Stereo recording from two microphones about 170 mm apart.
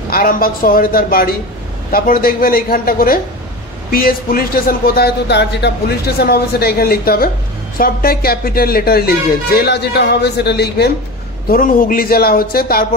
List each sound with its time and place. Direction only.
0.1 s speech: 60° left (ahead or behind); by 10.9 s 75° left (ahead or behind)
11.4 s speech: 55° left (ahead or behind)